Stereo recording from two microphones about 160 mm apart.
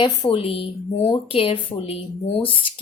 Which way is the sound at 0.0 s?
35° left (ahead or behind).